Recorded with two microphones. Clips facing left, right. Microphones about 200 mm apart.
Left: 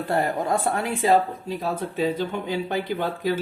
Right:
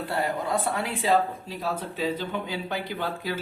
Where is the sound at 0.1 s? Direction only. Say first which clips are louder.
Left 4 dB; 50° left (ahead or behind).